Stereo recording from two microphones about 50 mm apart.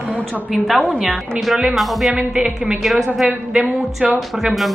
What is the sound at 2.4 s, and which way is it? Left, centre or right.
Speech, right.